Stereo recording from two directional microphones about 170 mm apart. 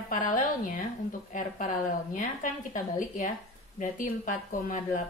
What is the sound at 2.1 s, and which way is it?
Speech, 50° left (ahead or behind).